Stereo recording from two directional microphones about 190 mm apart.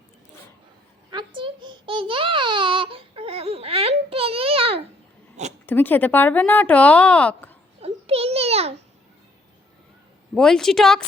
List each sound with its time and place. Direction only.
1.1 s babbling: 25° right (ahead or behind)
5.6 s speech: 10° left (ahead or behind)
7.8 s a sound: 30° right (ahead or behind)
10.3 s a woman's voice: 5° left (ahead or behind)